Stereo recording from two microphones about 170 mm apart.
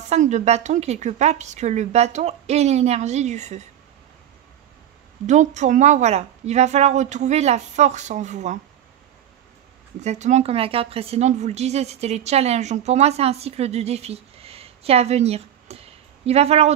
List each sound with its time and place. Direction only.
0.1 s a woman's voice: 40° right (ahead or behind)
5.2 s a woman's voice: 45° right (ahead or behind)
9.9 s a woman's voice: 45° right (ahead or behind)